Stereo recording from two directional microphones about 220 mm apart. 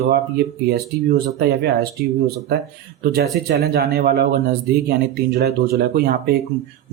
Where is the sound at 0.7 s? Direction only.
45° right (ahead or behind).